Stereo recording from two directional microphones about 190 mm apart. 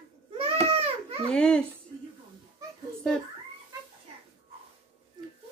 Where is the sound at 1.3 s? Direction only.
5° left (ahead or behind).